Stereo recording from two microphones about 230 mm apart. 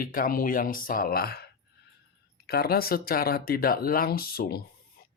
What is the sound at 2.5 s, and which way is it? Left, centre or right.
Speech, left.